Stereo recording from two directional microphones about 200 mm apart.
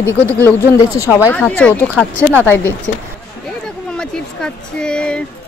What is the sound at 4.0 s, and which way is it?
Speech, 5° left (ahead or behind).